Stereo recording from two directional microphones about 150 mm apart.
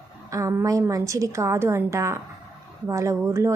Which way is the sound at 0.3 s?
20° right (ahead or behind).